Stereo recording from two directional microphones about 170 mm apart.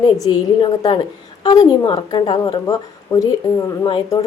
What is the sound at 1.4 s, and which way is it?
A woman's voice, 25° left (ahead or behind).